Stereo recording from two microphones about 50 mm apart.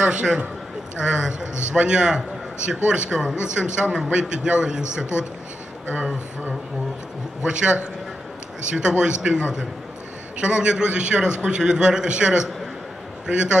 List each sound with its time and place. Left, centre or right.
0.0 s a man's voice: centre
7.4 s a man's voice: centre